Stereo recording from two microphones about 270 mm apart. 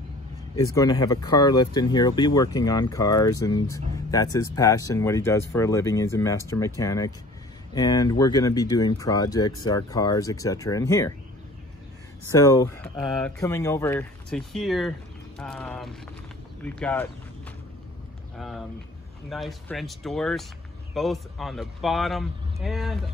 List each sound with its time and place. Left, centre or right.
0.6 s speech: centre
12.3 s speech: centre
18.4 s speech: centre